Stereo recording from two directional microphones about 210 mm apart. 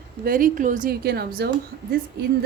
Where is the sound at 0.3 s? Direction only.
40° right (ahead or behind).